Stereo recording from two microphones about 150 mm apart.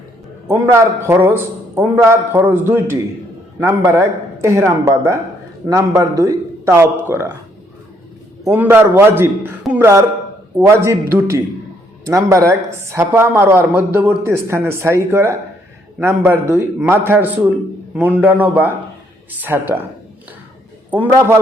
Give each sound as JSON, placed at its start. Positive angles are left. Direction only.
{"t": 0.7, "sound": "a woman's voice", "side_deg": -15}
{"t": 8.4, "sound": "a woman's voice", "side_deg": -15}
{"t": 20.9, "sound": "a woman's voice", "side_deg": -10}